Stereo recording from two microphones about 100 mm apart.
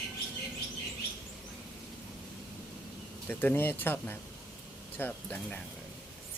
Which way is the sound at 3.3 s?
20° left (ahead or behind).